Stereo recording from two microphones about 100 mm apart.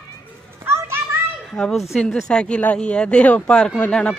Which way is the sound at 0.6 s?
25° right (ahead or behind).